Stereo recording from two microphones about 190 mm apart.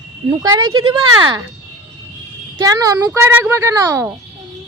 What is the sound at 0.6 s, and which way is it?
Speech, 90° right.